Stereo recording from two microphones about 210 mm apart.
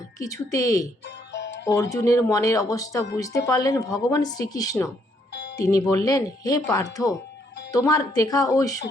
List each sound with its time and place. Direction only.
0.2 s speech: 15° left (ahead or behind)
1.0 s music: 55° left (ahead or behind)
1.6 s speech: 15° left (ahead or behind)
5.3 s music: 55° left (ahead or behind)
5.5 s speech: 15° left (ahead or behind)